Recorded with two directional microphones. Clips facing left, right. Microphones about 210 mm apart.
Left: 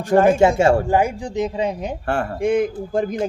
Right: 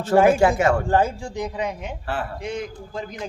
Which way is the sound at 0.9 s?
15° left (ahead or behind).